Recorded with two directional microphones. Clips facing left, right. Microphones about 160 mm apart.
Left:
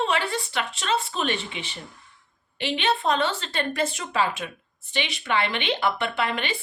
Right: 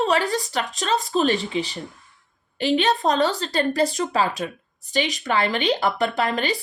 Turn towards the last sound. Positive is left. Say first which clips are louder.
# right 4 dB
turn(degrees=-40)  # may be behind; listen again after turning